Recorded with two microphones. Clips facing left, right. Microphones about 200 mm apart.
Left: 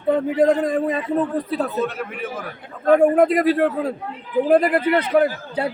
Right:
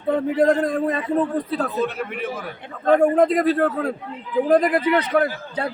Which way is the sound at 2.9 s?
10° left (ahead or behind).